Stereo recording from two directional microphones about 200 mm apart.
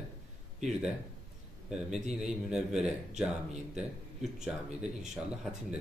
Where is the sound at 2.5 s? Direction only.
5° right (ahead or behind).